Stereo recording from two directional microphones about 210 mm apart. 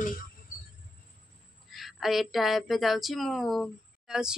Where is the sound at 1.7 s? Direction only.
Centre (ahead or behind).